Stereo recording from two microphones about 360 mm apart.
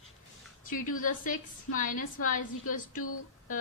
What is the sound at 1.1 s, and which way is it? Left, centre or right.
Speech, left.